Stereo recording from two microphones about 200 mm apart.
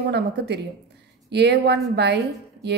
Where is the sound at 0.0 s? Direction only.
55° right (ahead or behind).